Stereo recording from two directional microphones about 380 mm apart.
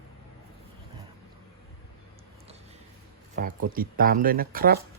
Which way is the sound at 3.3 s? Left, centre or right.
Right.